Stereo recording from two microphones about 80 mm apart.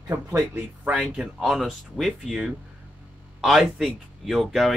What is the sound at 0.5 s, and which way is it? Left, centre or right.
Speech, centre.